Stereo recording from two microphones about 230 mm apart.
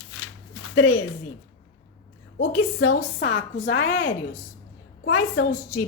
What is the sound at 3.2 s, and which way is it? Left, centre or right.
Speech, left.